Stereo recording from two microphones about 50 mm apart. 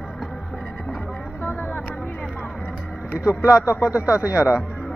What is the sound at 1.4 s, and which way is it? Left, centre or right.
Vehicle, left.